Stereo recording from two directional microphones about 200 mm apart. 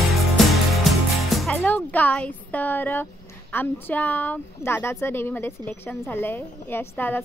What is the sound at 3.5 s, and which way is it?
Speech, 10° left (ahead or behind).